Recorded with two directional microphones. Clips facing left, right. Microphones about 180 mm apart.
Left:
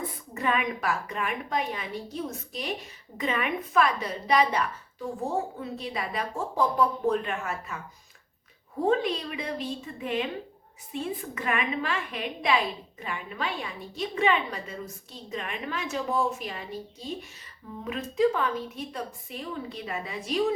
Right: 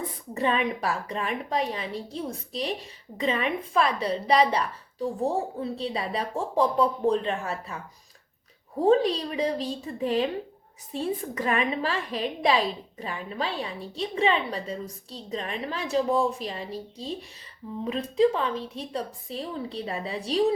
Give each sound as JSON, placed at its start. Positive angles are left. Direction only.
{"t": 0.3, "sound": "a woman's voice", "side_deg": -30}
{"t": 8.8, "sound": "a woman's voice", "side_deg": -35}